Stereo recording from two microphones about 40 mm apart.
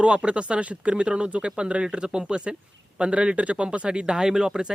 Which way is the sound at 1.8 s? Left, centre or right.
Centre.